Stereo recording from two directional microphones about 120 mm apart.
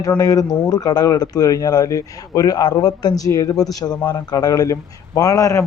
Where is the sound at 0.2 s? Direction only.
30° left (ahead or behind).